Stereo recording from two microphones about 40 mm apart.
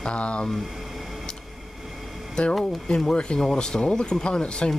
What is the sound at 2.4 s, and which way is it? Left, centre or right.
Speech, left.